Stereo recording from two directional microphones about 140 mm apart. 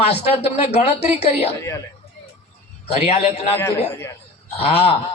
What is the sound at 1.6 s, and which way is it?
Speech, 20° left (ahead or behind).